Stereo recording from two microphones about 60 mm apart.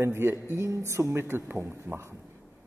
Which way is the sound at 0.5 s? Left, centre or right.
Right.